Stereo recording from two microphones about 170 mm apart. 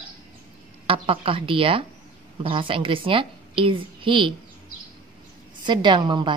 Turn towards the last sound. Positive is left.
turn(degrees=-25)  # may be behind; listen again after turning